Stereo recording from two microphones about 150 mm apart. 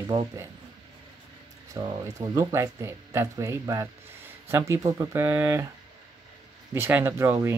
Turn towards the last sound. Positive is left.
turn(degrees=-15)  # may be behind; listen again after turning